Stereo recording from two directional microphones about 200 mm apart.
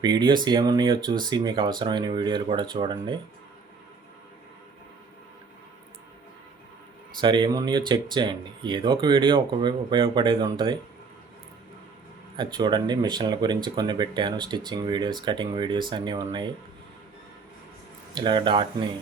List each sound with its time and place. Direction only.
0.0 s speech: 20° right (ahead or behind)
7.2 s speech: 25° right (ahead or behind)
12.4 s speech: 20° right (ahead or behind)
18.1 s speech: 25° right (ahead or behind)